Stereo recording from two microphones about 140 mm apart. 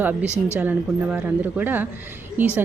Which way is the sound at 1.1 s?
10° right (ahead or behind).